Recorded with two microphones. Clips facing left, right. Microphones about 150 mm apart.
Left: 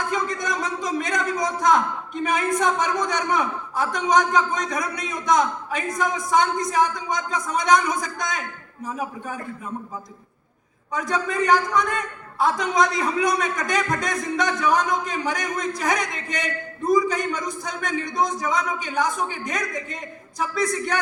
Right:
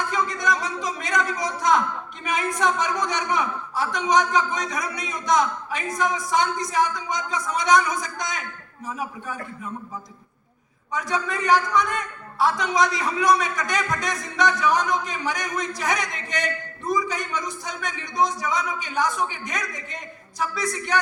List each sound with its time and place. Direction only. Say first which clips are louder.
0.1 s a sound: right 1 dB; 50° left (ahead or behind)
2.2 s a man's voice: left 2 dB; 50° left (ahead or behind)
10.9 s a man's voice: left 2 dB; 50° left (ahead or behind)